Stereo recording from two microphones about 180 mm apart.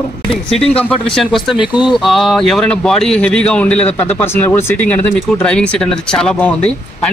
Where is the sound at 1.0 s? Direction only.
Centre (ahead or behind).